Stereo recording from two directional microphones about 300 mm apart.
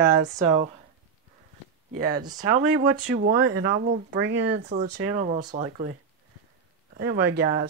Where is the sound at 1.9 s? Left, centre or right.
Right.